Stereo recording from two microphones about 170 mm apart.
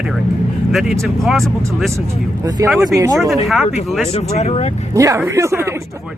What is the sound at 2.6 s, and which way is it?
Speech, 20° right (ahead or behind).